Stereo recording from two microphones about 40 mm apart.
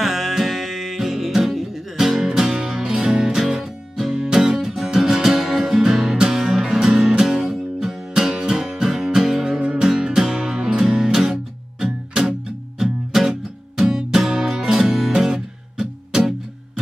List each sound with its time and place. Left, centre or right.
0.0 s music: centre; by 3.3 s right
3.3 s music: centre